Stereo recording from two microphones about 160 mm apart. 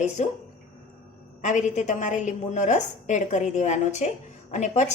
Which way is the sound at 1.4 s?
50° left (ahead or behind).